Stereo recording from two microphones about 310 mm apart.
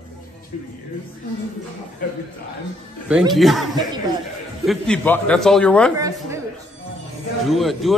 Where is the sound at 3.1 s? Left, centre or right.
Centre.